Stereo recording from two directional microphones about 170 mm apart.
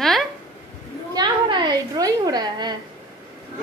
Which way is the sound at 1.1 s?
25° right (ahead or behind).